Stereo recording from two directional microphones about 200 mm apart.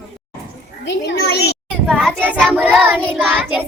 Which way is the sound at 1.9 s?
Centre (ahead or behind).